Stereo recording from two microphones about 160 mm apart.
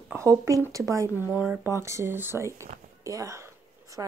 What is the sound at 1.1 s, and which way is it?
Speech, 20° left (ahead or behind).